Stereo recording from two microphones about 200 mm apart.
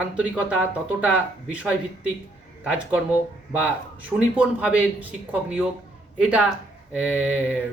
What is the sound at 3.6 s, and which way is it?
Speech, 5° right (ahead or behind).